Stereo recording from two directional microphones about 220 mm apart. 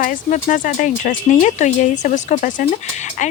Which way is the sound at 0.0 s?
40° left (ahead or behind).